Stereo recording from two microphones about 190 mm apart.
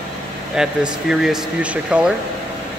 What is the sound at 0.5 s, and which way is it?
Speech, 5° right (ahead or behind).